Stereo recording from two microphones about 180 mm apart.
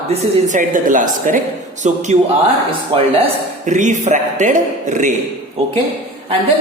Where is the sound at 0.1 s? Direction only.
45° right (ahead or behind).